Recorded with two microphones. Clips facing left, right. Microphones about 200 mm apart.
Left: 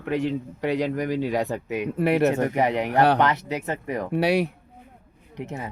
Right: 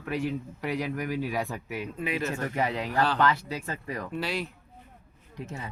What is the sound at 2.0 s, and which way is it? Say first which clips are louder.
Speech: left 11 dB; 70° left (ahead or behind).